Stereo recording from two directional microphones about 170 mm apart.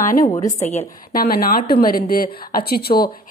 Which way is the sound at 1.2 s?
60° left (ahead or behind).